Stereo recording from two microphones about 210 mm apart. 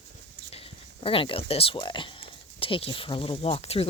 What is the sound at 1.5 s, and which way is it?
Speech, 25° left (ahead or behind).